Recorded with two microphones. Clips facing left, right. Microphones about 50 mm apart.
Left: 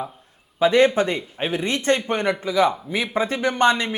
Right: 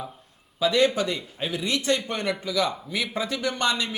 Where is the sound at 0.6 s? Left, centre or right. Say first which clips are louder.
Left 5 dB; left.